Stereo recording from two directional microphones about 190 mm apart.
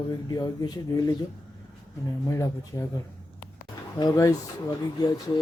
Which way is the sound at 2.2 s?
15° left (ahead or behind).